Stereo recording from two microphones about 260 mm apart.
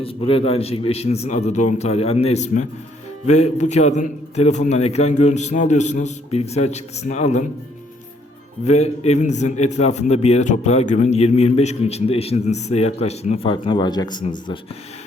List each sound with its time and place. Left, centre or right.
0.0 s a man's voice: left
8.6 s a man's voice: left